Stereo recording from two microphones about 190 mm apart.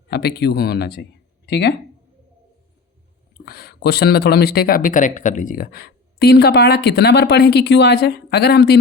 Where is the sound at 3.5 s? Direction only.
55° left (ahead or behind).